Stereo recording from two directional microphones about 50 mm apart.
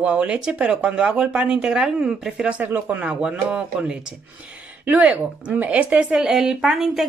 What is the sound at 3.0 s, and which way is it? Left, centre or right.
Speech, right.